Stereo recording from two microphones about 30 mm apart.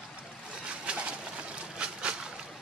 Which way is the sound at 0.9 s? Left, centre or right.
Right.